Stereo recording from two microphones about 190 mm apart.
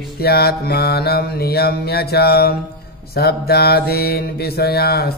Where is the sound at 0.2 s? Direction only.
55° left (ahead or behind).